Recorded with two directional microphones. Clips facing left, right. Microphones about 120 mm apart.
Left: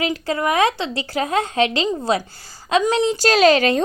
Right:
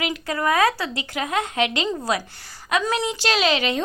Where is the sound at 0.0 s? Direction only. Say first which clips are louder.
Left 3 dB; 30° left (ahead or behind).